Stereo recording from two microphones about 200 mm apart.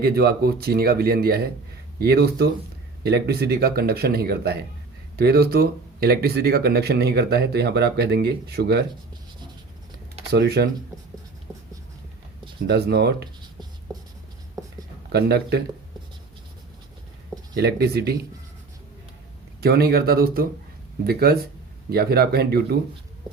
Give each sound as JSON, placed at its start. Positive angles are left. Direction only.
{"t": 0.0, "sound": "speech", "side_deg": -50}
{"t": 10.3, "sound": "speech", "side_deg": -55}
{"t": 12.6, "sound": "speech", "side_deg": -55}
{"t": 13.4, "sound": "writing", "side_deg": -20}
{"t": 15.1, "sound": "speech", "side_deg": -55}
{"t": 17.6, "sound": "speech", "side_deg": -50}
{"t": 19.6, "sound": "speech", "side_deg": -50}